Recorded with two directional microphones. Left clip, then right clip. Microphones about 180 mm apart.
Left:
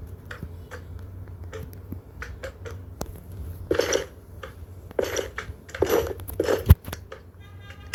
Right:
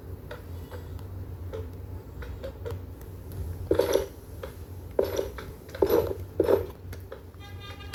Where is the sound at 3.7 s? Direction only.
25° left (ahead or behind).